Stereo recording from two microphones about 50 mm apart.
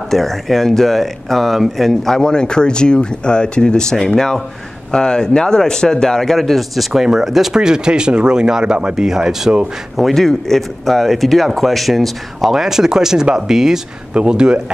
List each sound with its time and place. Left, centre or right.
0.1 s speech: centre
9.9 s speech: centre